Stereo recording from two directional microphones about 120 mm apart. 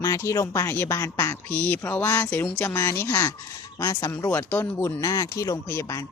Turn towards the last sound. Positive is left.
turn(degrees=25)  # may be behind; listen again after turning